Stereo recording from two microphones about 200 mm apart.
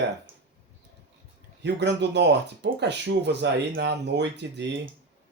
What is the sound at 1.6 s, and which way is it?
Speech, 60° right (ahead or behind).